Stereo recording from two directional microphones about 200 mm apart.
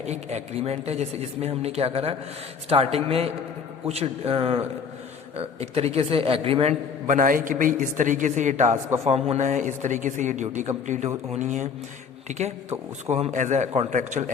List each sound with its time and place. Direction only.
0.0 s a man's voice: 35° right (ahead or behind)